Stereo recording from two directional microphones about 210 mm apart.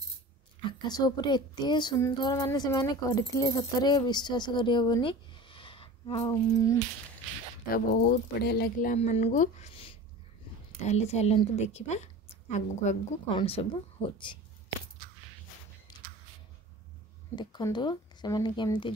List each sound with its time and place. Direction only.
0.7 s speech: 20° left (ahead or behind)
7.7 s a woman's voice: 50° left (ahead or behind); by 14.4 s 25° left (ahead or behind)
15.9 s a sound: 20° left (ahead or behind)
17.4 s speech: 20° left (ahead or behind)